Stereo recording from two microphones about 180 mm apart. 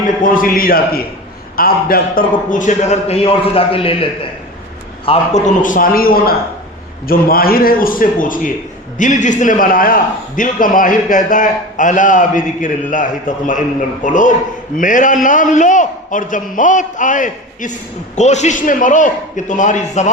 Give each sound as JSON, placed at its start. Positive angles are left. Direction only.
{"t": 0.2, "sound": "a man's voice", "side_deg": 50}